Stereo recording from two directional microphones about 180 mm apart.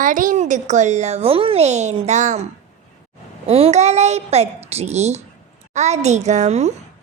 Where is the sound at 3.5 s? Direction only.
35° right (ahead or behind).